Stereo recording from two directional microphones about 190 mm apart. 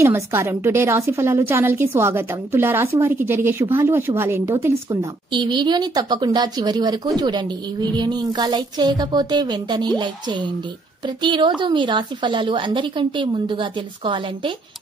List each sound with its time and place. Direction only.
0.0 s a woman's voice: 15° right (ahead or behind)
5.3 s a woman's voice: 25° right (ahead or behind)